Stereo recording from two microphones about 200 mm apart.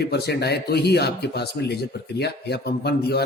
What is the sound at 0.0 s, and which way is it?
A man's voice, 55° left (ahead or behind).